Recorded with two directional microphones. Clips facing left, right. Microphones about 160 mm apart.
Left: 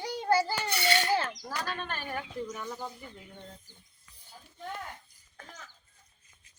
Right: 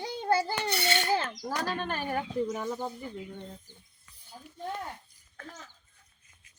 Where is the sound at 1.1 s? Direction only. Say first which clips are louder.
Even; 5° left (ahead or behind).